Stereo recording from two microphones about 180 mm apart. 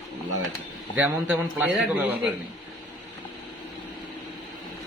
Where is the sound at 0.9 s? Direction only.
10° right (ahead or behind).